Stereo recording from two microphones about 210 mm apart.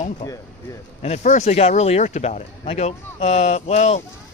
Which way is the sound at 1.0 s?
35° left (ahead or behind).